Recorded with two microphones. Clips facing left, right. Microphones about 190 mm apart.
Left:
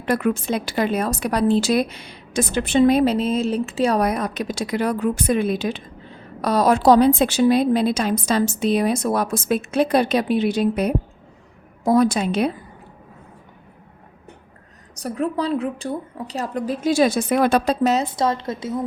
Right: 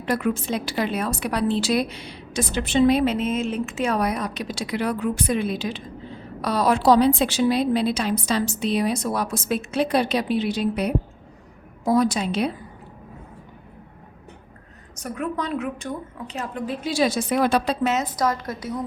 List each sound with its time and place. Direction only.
0.0 s a woman's voice: 55° left (ahead or behind)
14.9 s a woman's voice: 35° left (ahead or behind)